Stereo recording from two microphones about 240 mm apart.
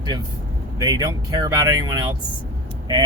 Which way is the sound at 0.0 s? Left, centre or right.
Centre.